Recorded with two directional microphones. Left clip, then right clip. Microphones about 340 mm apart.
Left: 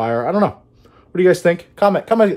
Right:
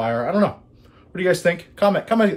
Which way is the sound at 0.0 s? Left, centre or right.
Left.